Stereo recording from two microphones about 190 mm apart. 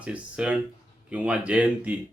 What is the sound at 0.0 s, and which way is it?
Speech, 5° right (ahead or behind).